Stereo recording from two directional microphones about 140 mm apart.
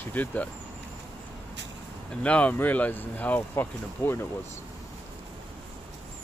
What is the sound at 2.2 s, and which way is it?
Speech, 10° left (ahead or behind).